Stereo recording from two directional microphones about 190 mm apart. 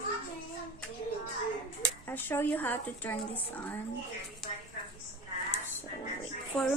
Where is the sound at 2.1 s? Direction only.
10° left (ahead or behind).